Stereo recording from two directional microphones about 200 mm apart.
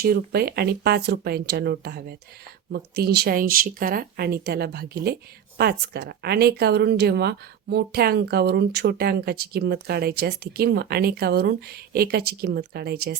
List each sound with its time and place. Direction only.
0.0 s a woman's voice: 50° right (ahead or behind)